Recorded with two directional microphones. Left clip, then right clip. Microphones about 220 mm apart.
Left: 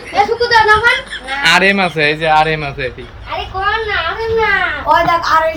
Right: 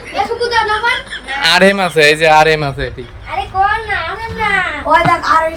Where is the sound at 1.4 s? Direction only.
35° right (ahead or behind).